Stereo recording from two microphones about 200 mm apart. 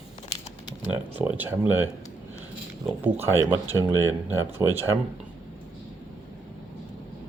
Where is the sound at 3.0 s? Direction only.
10° right (ahead or behind).